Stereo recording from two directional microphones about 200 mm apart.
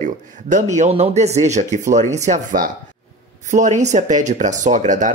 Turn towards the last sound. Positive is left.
turn(degrees=-40)  # may be behind; listen again after turning